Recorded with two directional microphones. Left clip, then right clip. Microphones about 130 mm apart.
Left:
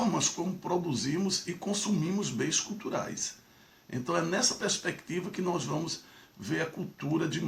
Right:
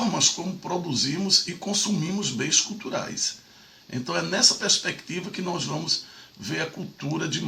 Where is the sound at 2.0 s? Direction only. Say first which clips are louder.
Right 4 dB; 5° right (ahead or behind).